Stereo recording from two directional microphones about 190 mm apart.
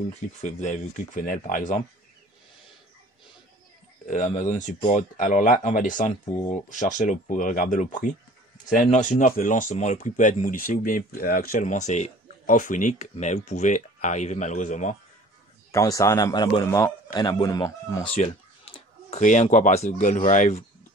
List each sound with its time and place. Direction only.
0.4 s speech: 40° left (ahead or behind)
4.1 s speech: 40° left (ahead or behind)
15.7 s a man's voice: 15° left (ahead or behind)
18.0 s speech: 30° left (ahead or behind)